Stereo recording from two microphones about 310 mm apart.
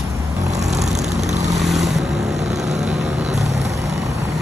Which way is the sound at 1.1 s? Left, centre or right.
Right.